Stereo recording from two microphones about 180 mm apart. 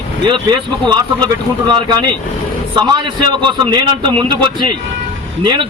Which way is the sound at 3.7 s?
25° right (ahead or behind).